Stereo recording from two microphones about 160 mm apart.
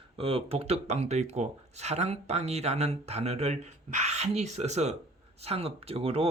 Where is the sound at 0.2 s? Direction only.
35° right (ahead or behind).